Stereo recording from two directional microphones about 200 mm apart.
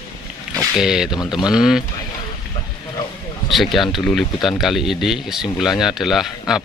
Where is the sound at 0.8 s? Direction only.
Centre (ahead or behind).